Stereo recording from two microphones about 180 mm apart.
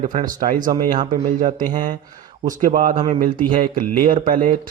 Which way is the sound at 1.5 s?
45° right (ahead or behind).